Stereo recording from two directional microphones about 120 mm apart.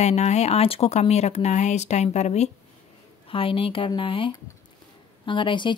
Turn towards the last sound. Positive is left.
turn(degrees=40)  # may be behind; listen again after turning